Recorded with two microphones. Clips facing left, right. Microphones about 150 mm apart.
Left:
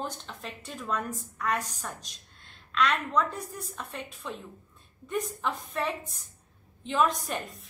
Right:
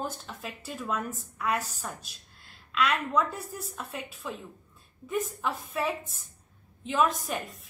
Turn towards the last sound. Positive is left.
turn(degrees=0)  # may be behind; listen again after turning